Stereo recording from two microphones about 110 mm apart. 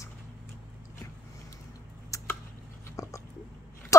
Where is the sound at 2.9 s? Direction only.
30° left (ahead or behind).